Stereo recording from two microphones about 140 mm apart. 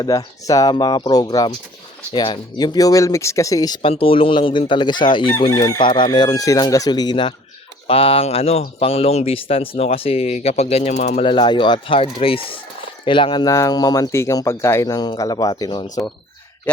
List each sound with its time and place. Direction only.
0.0 s speech: 25° left (ahead or behind)
3.8 s speech: 40° left (ahead or behind)
5.5 s speech: 20° left (ahead or behind); by 11.3 s 55° left (ahead or behind)
11.3 s speech: 35° left (ahead or behind)